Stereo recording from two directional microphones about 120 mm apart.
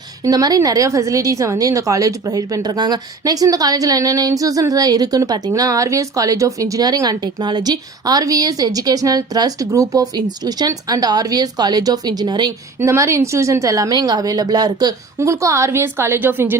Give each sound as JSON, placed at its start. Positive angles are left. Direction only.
{"t": 0.2, "sound": "a woman's voice", "side_deg": -30}
{"t": 12.8, "sound": "a woman's voice", "side_deg": -25}